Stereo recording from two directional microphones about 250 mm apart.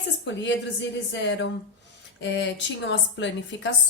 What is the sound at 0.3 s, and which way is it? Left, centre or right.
A woman's voice, left.